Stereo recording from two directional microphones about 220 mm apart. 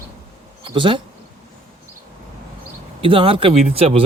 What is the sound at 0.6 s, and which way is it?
Insect, 20° right (ahead or behind).